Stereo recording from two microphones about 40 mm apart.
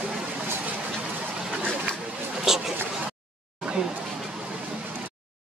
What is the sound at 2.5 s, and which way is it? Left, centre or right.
Speech, centre.